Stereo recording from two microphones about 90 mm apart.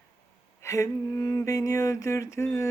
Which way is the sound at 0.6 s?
35° left (ahead or behind).